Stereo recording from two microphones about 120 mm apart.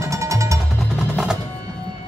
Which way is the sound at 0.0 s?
25° right (ahead or behind).